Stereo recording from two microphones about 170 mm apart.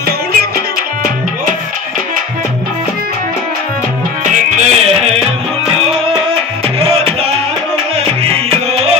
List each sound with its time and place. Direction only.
4.6 s music: 40° right (ahead or behind)
6.8 s music: 35° right (ahead or behind)
8.2 s music: 35° right (ahead or behind)